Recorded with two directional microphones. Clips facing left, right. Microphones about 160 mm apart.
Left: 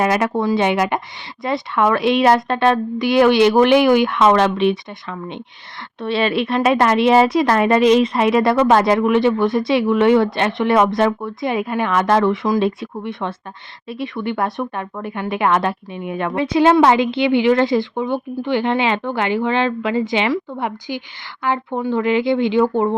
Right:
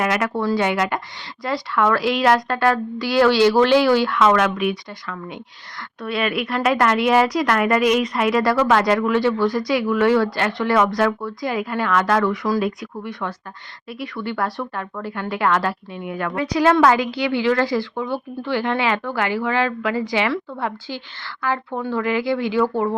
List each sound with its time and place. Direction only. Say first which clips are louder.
0.0 s a woman's voice: left 4 dB; 25° left (ahead or behind)